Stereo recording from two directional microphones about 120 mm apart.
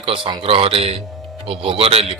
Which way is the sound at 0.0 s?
50° right (ahead or behind).